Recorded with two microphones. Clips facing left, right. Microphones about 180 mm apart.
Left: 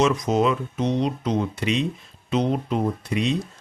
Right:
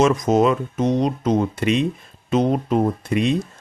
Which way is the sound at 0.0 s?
45° right (ahead or behind).